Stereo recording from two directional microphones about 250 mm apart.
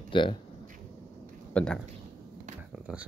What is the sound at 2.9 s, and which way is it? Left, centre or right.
Speech, centre.